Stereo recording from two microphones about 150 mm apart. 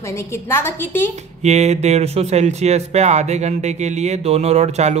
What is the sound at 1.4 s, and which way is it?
Speech, 50° right (ahead or behind).